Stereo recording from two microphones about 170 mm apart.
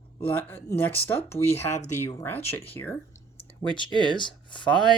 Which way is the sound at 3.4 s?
30° left (ahead or behind).